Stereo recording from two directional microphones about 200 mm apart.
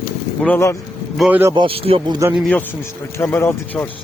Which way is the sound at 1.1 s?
5° right (ahead or behind).